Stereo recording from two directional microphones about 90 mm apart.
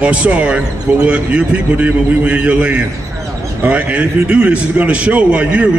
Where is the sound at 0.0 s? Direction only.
15° right (ahead or behind).